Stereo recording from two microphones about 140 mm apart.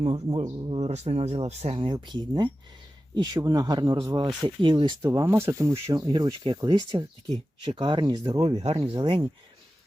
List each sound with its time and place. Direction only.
0.0 s speech: 40° right (ahead or behind)
5.0 s speech: 20° right (ahead or behind)
8.4 s speech: 45° right (ahead or behind)